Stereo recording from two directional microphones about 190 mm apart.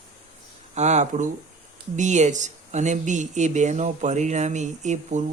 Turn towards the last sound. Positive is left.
turn(degrees=-40)  # may be behind; listen again after turning